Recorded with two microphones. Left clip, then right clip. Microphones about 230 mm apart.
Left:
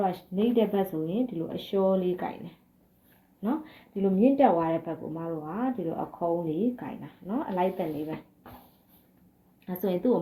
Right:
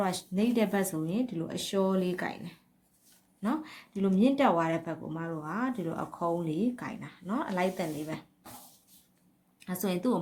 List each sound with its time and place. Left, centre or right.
0.0 s speech: right
9.6 s speech: right